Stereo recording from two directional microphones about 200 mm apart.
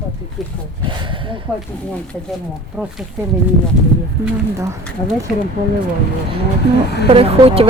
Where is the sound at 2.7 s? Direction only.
5° right (ahead or behind).